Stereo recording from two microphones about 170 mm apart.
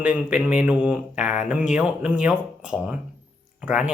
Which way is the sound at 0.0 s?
5° right (ahead or behind).